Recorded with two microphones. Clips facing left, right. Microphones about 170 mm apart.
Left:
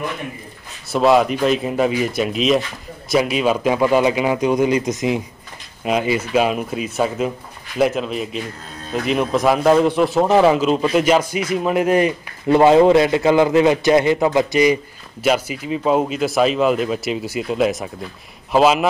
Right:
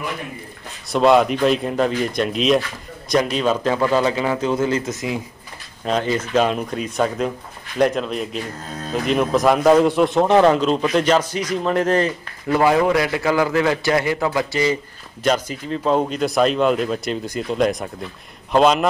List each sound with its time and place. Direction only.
0.9 s speech: centre (ahead or behind); by 5.2 s 20° left (ahead or behind)
5.9 s speech: 10° left (ahead or behind)
12.4 s a man's voice: 25° left (ahead or behind); by 18.9 s 5° left (ahead or behind)